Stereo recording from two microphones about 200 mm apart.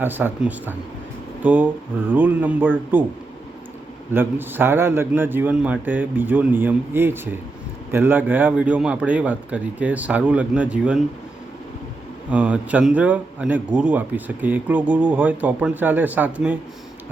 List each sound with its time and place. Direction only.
0.0 s a man's voice: 10° right (ahead or behind)
4.1 s a man's voice: 10° right (ahead or behind)
12.3 s a man's voice: 5° right (ahead or behind)